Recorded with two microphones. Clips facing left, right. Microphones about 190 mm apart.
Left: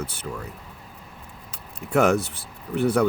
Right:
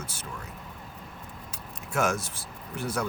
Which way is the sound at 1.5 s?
65° left (ahead or behind).